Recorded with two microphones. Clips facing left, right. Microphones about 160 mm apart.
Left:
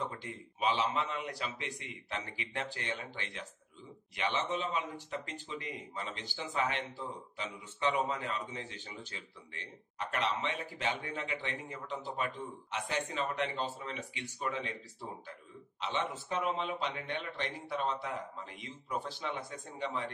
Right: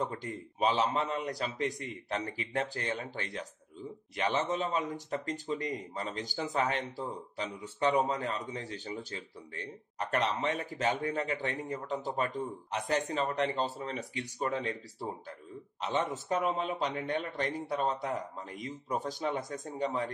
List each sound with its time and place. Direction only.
0.0 s a man's voice: 40° right (ahead or behind)